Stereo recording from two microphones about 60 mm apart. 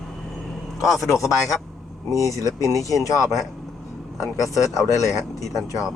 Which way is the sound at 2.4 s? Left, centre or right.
Left.